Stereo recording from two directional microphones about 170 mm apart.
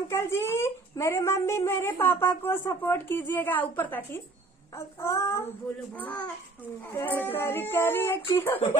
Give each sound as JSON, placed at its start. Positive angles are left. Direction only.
{"t": 0.1, "sound": "a child's voice", "side_deg": 15}